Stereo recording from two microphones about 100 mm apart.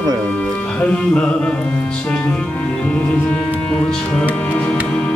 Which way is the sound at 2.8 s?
15° left (ahead or behind).